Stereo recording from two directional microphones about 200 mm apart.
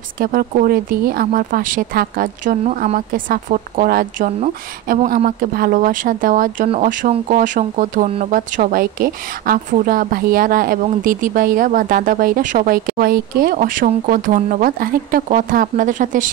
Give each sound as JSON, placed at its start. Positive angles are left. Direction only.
{"t": 0.2, "sound": "speech", "side_deg": -45}